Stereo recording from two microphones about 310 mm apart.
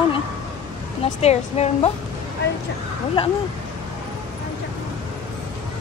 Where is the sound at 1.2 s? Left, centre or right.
Left.